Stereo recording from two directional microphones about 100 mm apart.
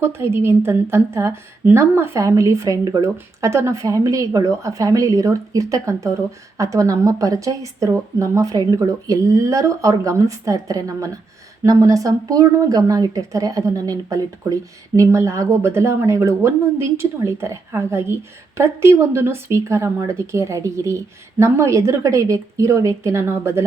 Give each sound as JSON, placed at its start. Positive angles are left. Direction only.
{"t": 0.0, "sound": "a woman's voice", "side_deg": -25}